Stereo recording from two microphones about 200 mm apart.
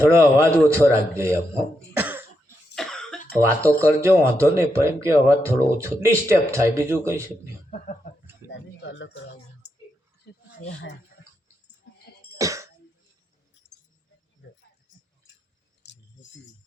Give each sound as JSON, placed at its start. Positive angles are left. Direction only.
{"t": 0.2, "sound": "speech", "side_deg": -15}
{"t": 1.9, "sound": "cough", "side_deg": -10}
{"t": 2.7, "sound": "cough", "side_deg": 0}
{"t": 3.6, "sound": "speech", "side_deg": -15}
{"t": 7.7, "sound": "a sound", "side_deg": 40}
{"t": 8.4, "sound": "a sound", "side_deg": 65}
{"t": 10.6, "sound": "speech", "side_deg": 70}
{"t": 11.9, "sound": "music", "side_deg": 75}
{"t": 12.4, "sound": "cough", "side_deg": -15}
{"t": 15.8, "sound": "keys jangling", "side_deg": 60}